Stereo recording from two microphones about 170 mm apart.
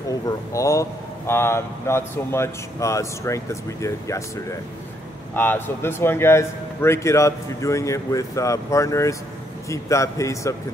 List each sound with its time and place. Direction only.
0.5 s a man's voice: 20° left (ahead or behind)
5.3 s a man's voice: 10° left (ahead or behind)